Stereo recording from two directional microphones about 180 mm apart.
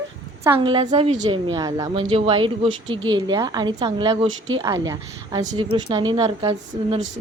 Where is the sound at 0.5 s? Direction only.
30° right (ahead or behind).